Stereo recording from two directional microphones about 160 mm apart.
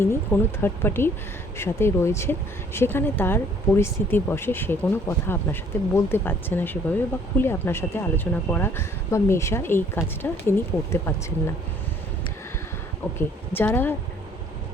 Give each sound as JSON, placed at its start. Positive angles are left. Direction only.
{"t": 0.0, "sound": "speech", "side_deg": 15}
{"t": 13.1, "sound": "speech", "side_deg": 15}